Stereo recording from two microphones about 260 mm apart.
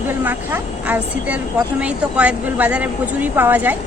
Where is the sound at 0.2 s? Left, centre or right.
Centre.